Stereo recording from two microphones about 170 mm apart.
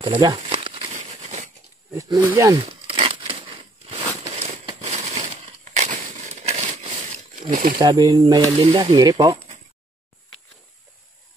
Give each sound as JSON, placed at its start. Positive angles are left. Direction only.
{"t": 0.0, "sound": "speech", "side_deg": -25}
{"t": 0.4, "sound": "crumpling", "side_deg": -30}
{"t": 0.9, "sound": "a sound", "side_deg": -40}
{"t": 2.0, "sound": "speech", "side_deg": -20}
{"t": 2.6, "sound": "a sound", "side_deg": -35}
{"t": 4.7, "sound": "crushing", "side_deg": -40}
{"t": 7.8, "sound": "speech", "side_deg": -25}
{"t": 8.5, "sound": "speech", "side_deg": -30}